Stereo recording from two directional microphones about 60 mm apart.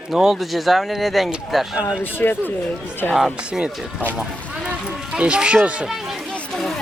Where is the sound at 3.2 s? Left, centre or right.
Centre.